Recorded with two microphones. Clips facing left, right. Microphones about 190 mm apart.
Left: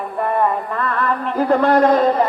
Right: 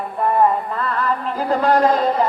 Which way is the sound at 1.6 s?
55° left (ahead or behind).